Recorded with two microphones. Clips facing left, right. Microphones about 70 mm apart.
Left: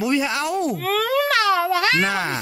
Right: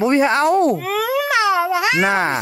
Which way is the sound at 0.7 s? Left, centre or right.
Centre.